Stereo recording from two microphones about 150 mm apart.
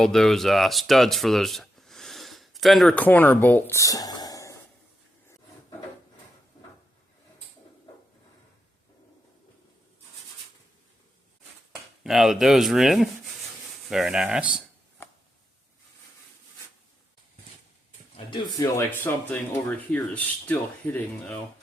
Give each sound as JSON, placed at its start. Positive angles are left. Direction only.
{"t": 0.0, "sound": "speech", "side_deg": 5}
{"t": 12.0, "sound": "speech", "side_deg": 0}
{"t": 18.3, "sound": "speech", "side_deg": 30}